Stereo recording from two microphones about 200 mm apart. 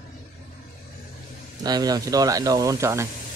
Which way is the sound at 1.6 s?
20° right (ahead or behind).